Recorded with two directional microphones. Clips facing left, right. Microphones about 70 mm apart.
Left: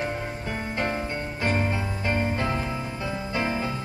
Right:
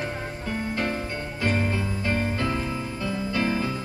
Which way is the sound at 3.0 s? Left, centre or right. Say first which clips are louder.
Right 2 dB; left.